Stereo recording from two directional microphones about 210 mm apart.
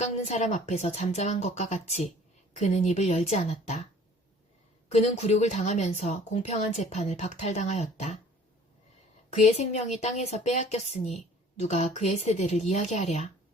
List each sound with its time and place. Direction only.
0.0 s a woman's voice: 35° left (ahead or behind)
4.9 s a woman's voice: 30° left (ahead or behind)
9.4 s a woman's voice: 30° left (ahead or behind)